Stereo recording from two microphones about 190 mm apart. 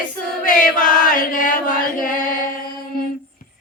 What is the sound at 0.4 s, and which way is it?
Chant, 45° left (ahead or behind).